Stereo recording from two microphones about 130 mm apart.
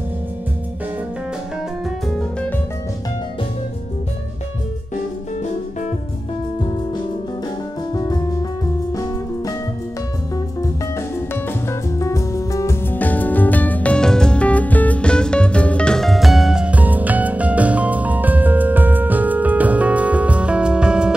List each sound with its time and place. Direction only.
7.9 s music: 30° left (ahead or behind)
12.0 s music: 25° left (ahead or behind); by 21.1 s 5° right (ahead or behind)